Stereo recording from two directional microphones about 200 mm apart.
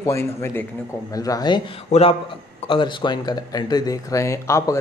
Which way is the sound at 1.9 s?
30° left (ahead or behind).